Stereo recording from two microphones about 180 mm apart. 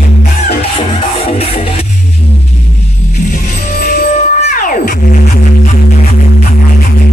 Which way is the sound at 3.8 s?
50° left (ahead or behind).